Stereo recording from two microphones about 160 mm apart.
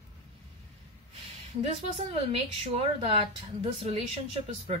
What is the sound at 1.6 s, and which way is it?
A woman's voice, 40° right (ahead or behind).